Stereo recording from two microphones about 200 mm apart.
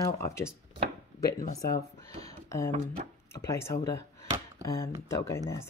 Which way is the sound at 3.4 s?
15° left (ahead or behind).